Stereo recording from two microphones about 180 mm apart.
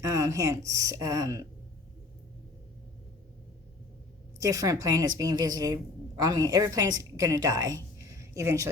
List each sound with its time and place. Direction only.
0.0 s a woman's voice: 15° right (ahead or behind)
4.4 s a woman's voice: 20° right (ahead or behind)
7.9 s a sound: 15° right (ahead or behind)